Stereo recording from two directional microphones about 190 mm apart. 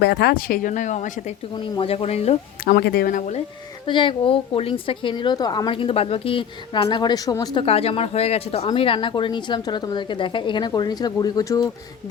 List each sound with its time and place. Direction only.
0.0 s speech: 60° left (ahead or behind); by 1.1 s 40° left (ahead or behind)
1.5 s speech: 25° left (ahead or behind)
2.6 s speech: 55° left (ahead or behind)
3.8 s a woman's voice: 25° left (ahead or behind)